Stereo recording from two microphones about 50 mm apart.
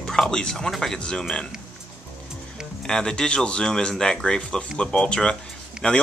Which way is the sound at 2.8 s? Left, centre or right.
Centre.